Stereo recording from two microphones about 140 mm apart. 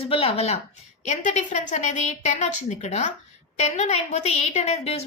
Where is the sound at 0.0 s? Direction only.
45° left (ahead or behind).